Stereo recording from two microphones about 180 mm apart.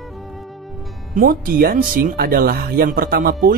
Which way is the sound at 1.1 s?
50° right (ahead or behind).